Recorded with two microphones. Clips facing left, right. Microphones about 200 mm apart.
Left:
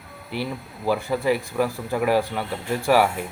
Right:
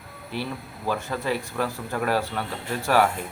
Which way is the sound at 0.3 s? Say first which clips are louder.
Left 2 dB; 10° left (ahead or behind).